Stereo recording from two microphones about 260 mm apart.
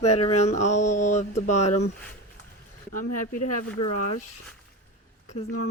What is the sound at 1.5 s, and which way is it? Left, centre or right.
Speech, left.